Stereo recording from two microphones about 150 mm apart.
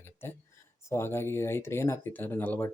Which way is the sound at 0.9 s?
15° left (ahead or behind).